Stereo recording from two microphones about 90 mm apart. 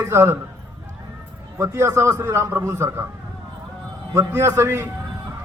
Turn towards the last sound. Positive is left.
turn(degrees=-30)  # may be behind; listen again after turning